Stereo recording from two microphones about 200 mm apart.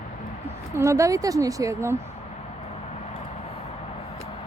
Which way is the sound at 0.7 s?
15° right (ahead or behind).